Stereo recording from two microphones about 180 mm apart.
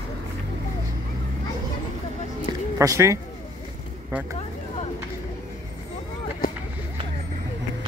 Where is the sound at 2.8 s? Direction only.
15° right (ahead or behind).